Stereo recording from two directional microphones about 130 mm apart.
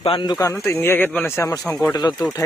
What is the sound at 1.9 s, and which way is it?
Speech, 30° left (ahead or behind).